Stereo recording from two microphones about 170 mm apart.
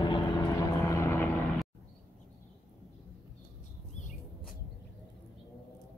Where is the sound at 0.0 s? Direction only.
25° left (ahead or behind).